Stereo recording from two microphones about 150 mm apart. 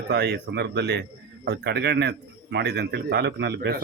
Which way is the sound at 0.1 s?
90° right.